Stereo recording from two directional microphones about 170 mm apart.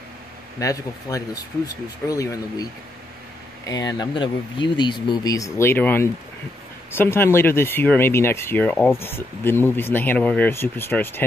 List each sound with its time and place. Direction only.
0.6 s speech: 20° left (ahead or behind)